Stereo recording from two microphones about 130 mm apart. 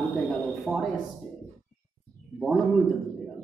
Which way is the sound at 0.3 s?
Centre (ahead or behind).